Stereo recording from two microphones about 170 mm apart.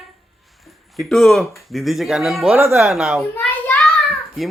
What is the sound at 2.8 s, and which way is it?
Speech, centre (ahead or behind).